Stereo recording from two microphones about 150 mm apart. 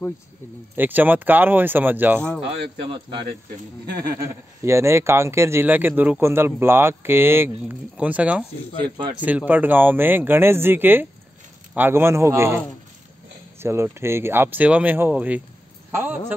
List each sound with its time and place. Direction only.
0.7 s speech: 10° right (ahead or behind)
4.0 s speech: 20° right (ahead or behind)
13.6 s a man's voice: 15° right (ahead or behind)